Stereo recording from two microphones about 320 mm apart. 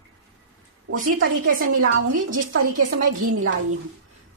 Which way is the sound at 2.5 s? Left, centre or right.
Right.